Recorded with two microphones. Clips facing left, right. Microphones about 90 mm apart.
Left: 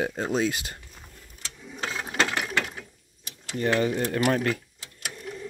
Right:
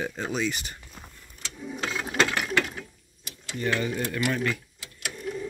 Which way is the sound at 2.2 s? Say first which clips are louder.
Even; 15° left (ahead or behind).